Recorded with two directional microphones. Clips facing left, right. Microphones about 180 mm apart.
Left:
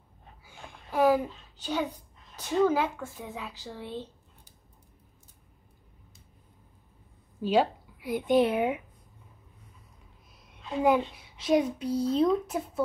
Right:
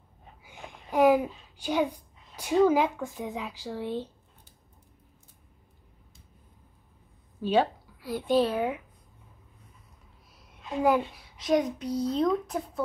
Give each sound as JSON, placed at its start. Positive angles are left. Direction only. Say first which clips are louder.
{"t": 0.4, "sound": "a child's voice", "louder": "right 3 dB", "side_deg": -15}
{"t": 7.4, "sound": "a woman's voice", "louder": "even", "side_deg": 15}
{"t": 11.4, "sound": "a woman's voice", "louder": "left 1 dB", "side_deg": 5}